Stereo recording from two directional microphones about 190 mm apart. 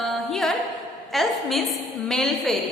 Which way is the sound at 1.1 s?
Centre (ahead or behind).